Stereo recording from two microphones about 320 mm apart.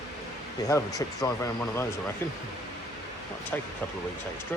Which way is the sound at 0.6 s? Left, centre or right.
Centre.